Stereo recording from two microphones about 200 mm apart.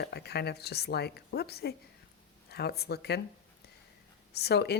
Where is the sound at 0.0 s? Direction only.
55° left (ahead or behind).